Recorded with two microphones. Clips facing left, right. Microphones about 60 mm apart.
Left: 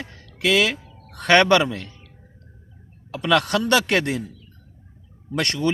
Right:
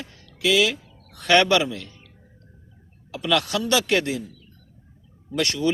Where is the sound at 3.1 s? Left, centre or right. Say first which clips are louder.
Left 3 dB; left.